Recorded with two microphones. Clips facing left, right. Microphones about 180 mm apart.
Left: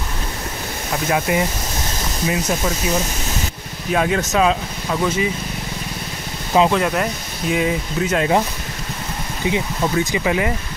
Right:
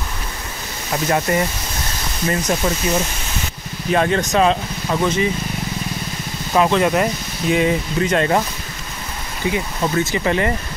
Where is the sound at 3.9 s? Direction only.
5° left (ahead or behind).